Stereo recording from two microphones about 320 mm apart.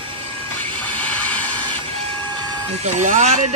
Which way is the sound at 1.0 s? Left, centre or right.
Centre.